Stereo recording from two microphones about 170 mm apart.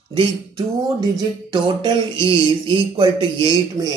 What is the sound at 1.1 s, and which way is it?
Music, 25° right (ahead or behind).